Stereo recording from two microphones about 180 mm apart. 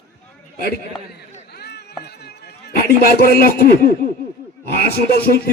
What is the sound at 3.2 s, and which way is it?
Speech, 55° left (ahead or behind).